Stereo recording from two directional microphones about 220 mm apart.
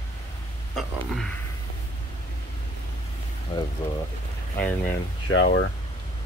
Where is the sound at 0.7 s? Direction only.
Centre (ahead or behind).